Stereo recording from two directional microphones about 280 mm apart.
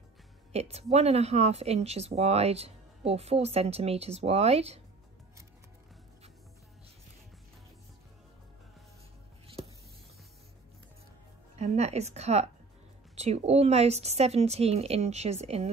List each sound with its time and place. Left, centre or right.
0.5 s speech: right
11.5 s a woman's voice: right